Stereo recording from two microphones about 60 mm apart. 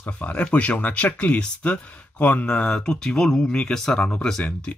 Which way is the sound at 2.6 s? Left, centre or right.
Centre.